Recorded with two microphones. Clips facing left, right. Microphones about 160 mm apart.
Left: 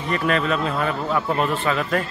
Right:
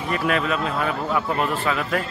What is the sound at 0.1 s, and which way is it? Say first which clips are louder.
A man's voice: left 1 dB; 5° right (ahead or behind).